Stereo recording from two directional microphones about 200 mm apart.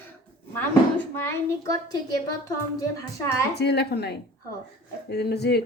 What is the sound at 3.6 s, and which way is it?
Speech, 55° left (ahead or behind).